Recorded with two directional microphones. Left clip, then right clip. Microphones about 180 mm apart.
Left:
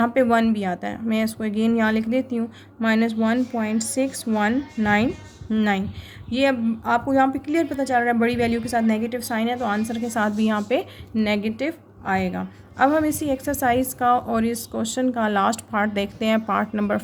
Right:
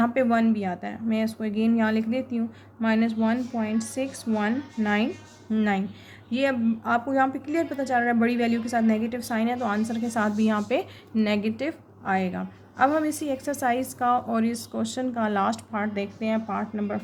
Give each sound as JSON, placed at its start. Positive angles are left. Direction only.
{"t": 0.0, "sound": "a woman's voice", "side_deg": 15}